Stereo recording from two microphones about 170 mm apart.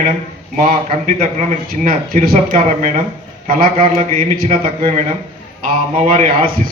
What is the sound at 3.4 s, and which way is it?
Speech, 60° right (ahead or behind).